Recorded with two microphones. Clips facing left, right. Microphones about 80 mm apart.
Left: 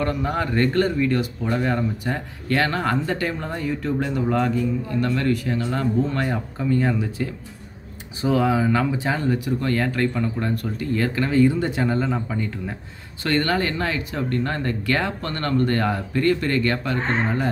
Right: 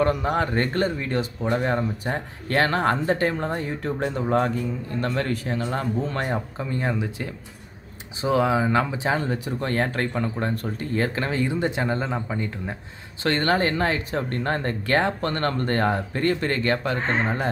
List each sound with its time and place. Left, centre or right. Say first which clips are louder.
0.0 s speech: right 2 dB; right
6.7 s speech: left 5 dB; centre
13.2 s speech: even; right